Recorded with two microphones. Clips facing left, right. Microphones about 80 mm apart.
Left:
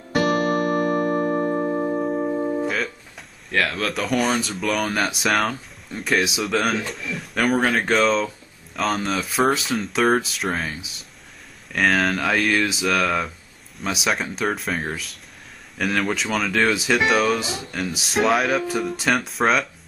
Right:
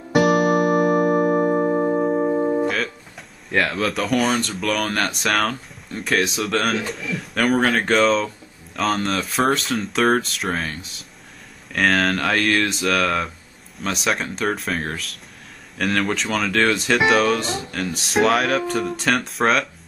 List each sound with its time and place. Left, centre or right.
0.1 s music: centre
2.6 s speech: centre